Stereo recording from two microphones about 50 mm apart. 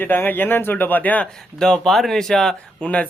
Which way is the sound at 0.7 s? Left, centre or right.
Left.